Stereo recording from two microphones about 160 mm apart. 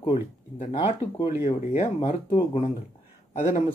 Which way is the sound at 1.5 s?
45° left (ahead or behind).